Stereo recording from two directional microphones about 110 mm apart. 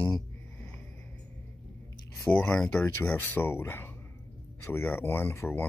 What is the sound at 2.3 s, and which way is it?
Speech, 10° left (ahead or behind).